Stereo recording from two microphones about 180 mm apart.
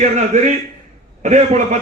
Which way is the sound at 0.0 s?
40° right (ahead or behind).